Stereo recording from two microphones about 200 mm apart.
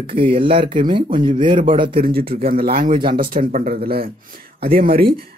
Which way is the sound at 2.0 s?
50° right (ahead or behind).